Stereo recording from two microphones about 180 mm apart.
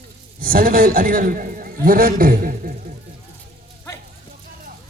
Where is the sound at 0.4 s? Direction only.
50° right (ahead or behind).